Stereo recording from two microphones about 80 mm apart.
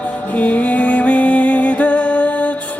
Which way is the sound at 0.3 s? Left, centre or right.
Centre.